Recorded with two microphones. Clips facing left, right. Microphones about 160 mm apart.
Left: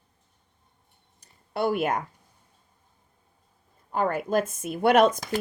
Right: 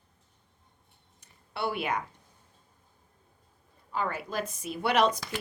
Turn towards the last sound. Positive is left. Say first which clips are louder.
# left 6 dB
turn(degrees=45)  # may be behind; listen again after turning